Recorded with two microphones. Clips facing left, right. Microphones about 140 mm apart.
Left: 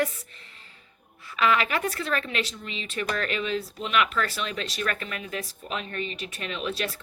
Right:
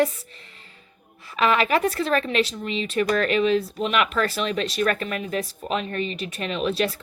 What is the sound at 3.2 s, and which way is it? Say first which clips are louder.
Speech: right 8 dB; 35° right (ahead or behind).